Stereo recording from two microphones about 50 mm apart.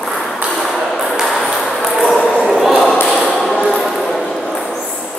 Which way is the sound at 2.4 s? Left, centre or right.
Centre.